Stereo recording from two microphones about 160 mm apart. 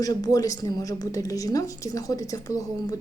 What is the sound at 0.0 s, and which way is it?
A woman's voice, 25° left (ahead or behind).